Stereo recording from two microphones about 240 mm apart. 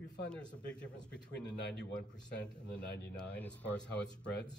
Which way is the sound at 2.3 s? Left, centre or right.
Left.